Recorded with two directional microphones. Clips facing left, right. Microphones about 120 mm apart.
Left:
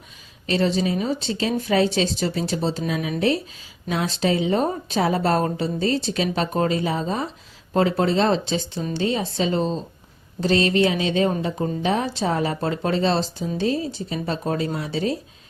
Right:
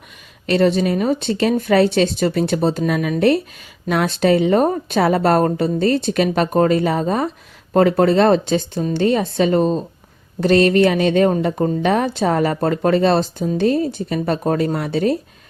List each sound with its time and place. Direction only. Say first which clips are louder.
0.4 s speech: right 6 dB; 60° right (ahead or behind)